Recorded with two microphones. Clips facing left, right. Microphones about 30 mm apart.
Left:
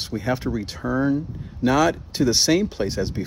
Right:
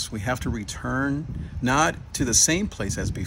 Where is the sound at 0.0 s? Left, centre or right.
Left.